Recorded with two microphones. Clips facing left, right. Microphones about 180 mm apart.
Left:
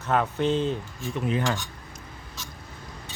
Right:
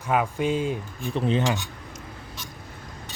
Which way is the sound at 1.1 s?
30° right (ahead or behind).